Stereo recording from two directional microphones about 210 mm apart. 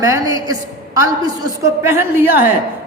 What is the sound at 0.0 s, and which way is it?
A woman's voice, 15° right (ahead or behind).